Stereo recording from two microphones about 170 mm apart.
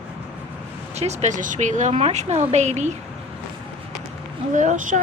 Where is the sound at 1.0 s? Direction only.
40° right (ahead or behind).